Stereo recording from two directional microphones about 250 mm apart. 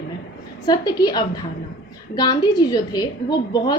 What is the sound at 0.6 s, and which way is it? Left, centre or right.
A woman's voice, centre.